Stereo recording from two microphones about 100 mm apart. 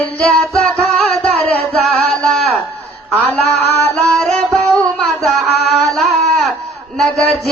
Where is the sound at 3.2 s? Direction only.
15° left (ahead or behind).